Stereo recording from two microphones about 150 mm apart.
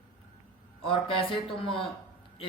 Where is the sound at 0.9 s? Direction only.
35° left (ahead or behind).